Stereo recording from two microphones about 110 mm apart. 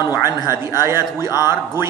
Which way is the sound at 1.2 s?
35° left (ahead or behind).